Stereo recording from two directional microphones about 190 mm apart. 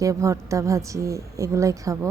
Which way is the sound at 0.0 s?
15° right (ahead or behind).